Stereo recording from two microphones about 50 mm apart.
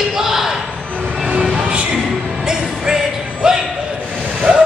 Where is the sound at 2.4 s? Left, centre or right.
Centre.